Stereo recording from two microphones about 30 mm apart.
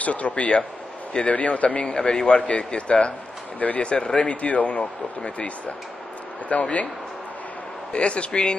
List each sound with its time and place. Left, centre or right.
0.0 s speech: left
1.9 s speech: left
3.5 s speech: left
3.8 s speech: left
4.3 s speech: left
6.5 s speech: left
7.9 s speech: left